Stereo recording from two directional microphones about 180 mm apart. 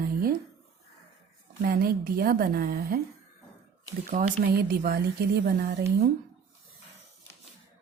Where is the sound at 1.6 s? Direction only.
55° right (ahead or behind).